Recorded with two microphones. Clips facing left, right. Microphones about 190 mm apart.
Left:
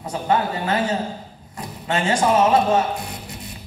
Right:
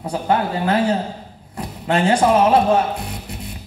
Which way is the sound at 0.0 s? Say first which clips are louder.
Right 2 dB; 60° right (ahead or behind).